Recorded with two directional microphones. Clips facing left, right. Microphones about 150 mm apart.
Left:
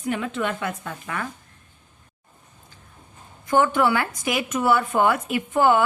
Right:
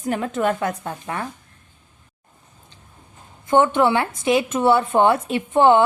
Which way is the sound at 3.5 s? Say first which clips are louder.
Right 3 dB; 25° right (ahead or behind).